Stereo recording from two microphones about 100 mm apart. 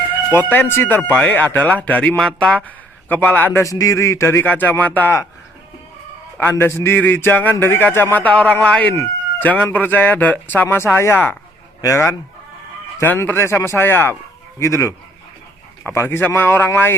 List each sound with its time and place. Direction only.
0.3 s a man's voice: 20° left (ahead or behind)
3.6 s a man's voice: 35° left (ahead or behind); by 5.2 s 20° left (ahead or behind)
6.3 s a man's voice: 20° left (ahead or behind)